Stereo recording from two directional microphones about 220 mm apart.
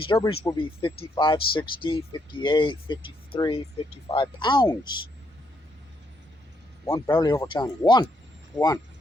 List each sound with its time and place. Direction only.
0.0 s speech: 25° left (ahead or behind)
6.8 s speech: 15° left (ahead or behind)